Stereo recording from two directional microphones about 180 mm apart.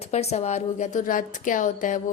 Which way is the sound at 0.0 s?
35° left (ahead or behind).